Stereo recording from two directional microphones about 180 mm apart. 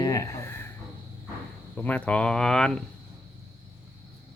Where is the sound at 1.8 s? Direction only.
10° left (ahead or behind).